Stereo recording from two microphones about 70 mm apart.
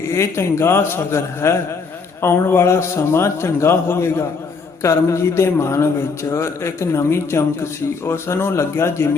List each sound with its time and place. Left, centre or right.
0.1 s a man's voice: left